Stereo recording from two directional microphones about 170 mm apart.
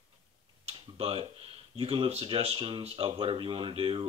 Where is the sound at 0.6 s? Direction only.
35° right (ahead or behind).